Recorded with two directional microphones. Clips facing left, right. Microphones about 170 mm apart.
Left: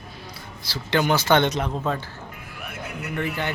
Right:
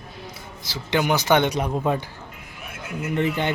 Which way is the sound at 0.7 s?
15° right (ahead or behind).